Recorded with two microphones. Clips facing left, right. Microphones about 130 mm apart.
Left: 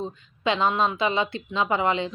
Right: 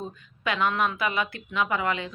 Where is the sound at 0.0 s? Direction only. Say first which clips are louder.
Left 5 dB; 25° left (ahead or behind).